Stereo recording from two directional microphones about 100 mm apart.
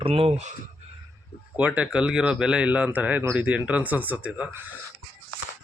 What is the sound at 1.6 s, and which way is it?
Speech, 15° right (ahead or behind).